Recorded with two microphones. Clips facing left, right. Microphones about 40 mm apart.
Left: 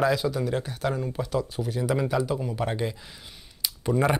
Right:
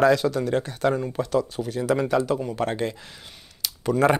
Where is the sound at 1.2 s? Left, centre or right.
Right.